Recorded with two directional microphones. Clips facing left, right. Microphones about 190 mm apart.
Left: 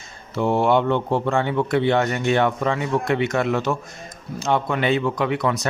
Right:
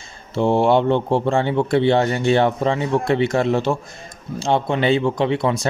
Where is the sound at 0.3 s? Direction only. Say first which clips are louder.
Right 3 dB; 30° right (ahead or behind).